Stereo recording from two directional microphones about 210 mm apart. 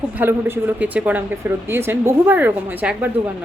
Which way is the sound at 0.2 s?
10° right (ahead or behind).